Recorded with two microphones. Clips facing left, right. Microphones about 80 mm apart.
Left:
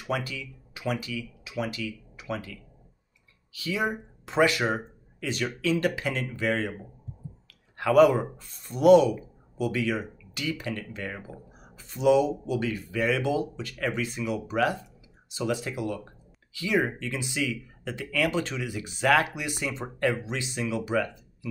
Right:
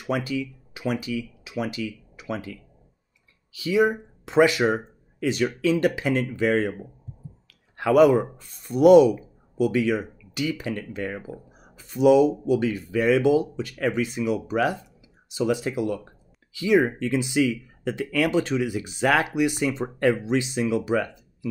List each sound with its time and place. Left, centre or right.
0.0 s speech: right
3.5 s speech: centre
7.7 s speech: centre